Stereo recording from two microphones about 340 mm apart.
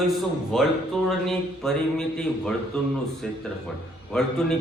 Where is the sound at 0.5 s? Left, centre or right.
Centre.